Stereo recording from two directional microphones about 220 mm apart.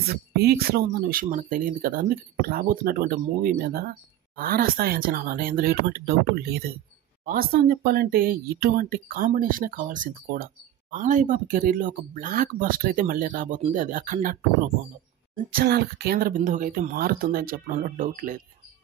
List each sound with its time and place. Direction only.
0.1 s speech: 45° right (ahead or behind)
15.5 s speech: 45° right (ahead or behind)